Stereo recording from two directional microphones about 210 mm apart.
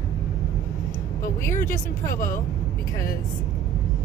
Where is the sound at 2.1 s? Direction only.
40° left (ahead or behind).